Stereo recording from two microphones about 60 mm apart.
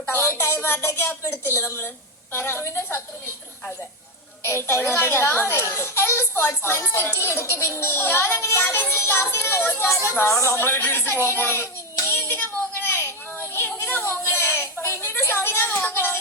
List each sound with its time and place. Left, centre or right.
0.1 s a child's voice: left
4.4 s a child's voice: left
9.9 s a child's voice: left
10.4 s hands: left
13.8 s a sound: left
15.8 s music: left